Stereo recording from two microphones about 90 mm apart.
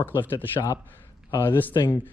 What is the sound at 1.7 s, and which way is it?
Speech, 40° left (ahead or behind).